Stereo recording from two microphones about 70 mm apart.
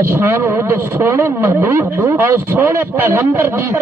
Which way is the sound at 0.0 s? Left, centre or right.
Right.